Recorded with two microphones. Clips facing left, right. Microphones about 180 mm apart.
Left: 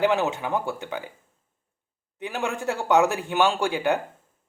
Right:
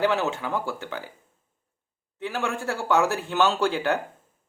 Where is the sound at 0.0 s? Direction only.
15° left (ahead or behind).